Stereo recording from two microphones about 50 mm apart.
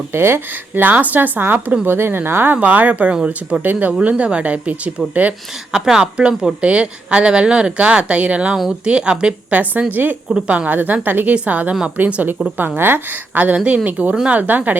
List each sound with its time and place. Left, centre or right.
0.1 s speech: right
4.0 s speech: right
5.7 s speech: centre
9.5 s speech: right
10.2 s a woman's voice: centre
10.7 s speech: right
12.5 s a woman's voice: right